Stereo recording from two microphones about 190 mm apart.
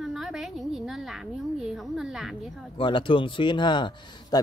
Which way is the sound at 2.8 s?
25° left (ahead or behind).